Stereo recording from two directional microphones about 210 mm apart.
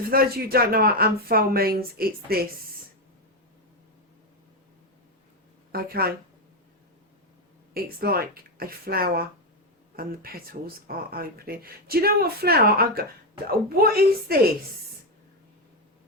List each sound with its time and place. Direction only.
0.1 s speech: 45° right (ahead or behind)
5.7 s speech: 45° right (ahead or behind)
7.7 s speech: 45° right (ahead or behind)